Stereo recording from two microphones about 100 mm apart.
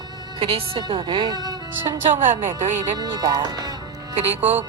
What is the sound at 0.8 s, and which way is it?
Speech, 50° right (ahead or behind).